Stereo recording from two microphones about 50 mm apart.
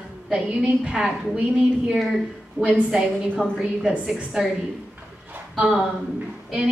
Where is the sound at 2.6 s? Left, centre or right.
Right.